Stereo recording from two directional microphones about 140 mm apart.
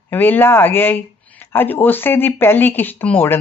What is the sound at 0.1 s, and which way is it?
Speech, 15° left (ahead or behind).